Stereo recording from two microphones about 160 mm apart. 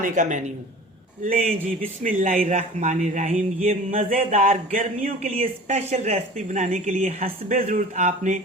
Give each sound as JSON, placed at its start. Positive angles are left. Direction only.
{"t": 0.0, "sound": "a man's voice", "side_deg": -50}